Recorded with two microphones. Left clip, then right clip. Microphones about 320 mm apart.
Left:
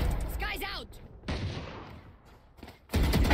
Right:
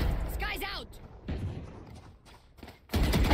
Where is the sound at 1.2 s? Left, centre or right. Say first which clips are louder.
Left 5 dB; centre.